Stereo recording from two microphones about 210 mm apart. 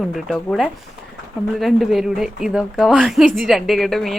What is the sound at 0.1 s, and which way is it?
A woman's voice, centre (ahead or behind).